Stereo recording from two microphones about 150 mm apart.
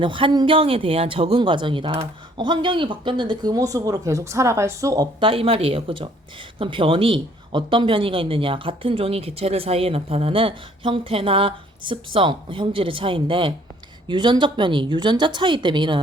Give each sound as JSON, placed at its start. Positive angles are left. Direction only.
{"t": 0.0, "sound": "speech", "side_deg": -35}
{"t": 5.2, "sound": "speech", "side_deg": -40}